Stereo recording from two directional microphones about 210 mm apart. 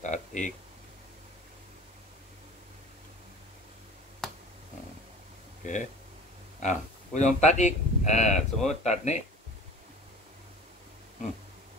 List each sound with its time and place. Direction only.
0.0 s speech: 35° left (ahead or behind)
4.2 s finger snapping: centre (ahead or behind)
5.6 s speech: 35° left (ahead or behind)